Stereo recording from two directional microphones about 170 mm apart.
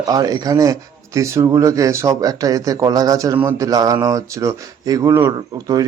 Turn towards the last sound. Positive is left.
turn(degrees=-20)  # may be behind; listen again after turning